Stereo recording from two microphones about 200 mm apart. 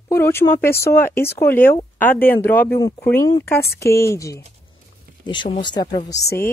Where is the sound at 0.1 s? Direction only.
10° left (ahead or behind).